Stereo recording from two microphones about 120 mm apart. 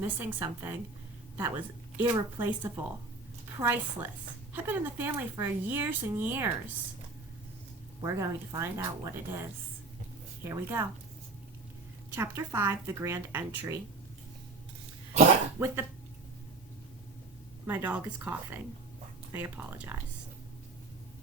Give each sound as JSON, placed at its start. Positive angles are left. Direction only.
{"t": 0.0, "sound": "speech", "side_deg": -15}
{"t": 8.0, "sound": "speech", "side_deg": -25}
{"t": 12.1, "sound": "speech", "side_deg": -25}
{"t": 15.5, "sound": "speech", "side_deg": -20}
{"t": 17.7, "sound": "speech", "side_deg": -15}